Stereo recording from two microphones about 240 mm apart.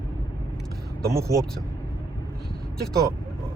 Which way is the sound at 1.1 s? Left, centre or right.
Centre.